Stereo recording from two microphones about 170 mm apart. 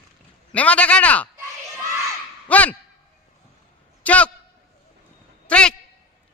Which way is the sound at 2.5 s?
10° left (ahead or behind).